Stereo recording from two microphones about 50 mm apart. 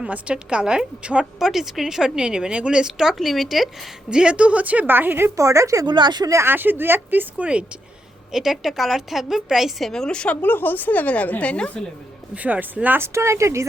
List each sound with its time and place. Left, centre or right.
0.0 s a woman's voice: right
1.4 s speech: centre
3.2 s a woman's voice: centre
4.1 s a woman's voice: centre; by 5.3 s right
5.4 s speech: right
6.4 s speech: right
8.3 s a woman's voice: centre
9.9 s a woman's voice: centre
10.4 s speech: left
12.3 s a woman's voice: right
13.0 s speech: right